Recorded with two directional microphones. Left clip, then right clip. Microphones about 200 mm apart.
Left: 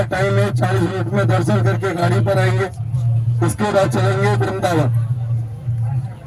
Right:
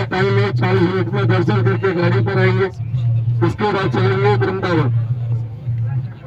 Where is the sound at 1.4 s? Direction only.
50° left (ahead or behind).